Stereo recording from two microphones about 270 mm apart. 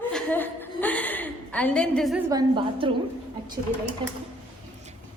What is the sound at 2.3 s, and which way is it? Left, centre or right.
Speech, centre.